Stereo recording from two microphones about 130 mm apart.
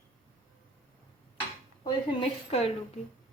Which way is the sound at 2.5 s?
50° left (ahead or behind).